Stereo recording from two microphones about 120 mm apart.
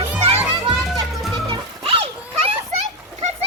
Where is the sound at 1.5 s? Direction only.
50° right (ahead or behind).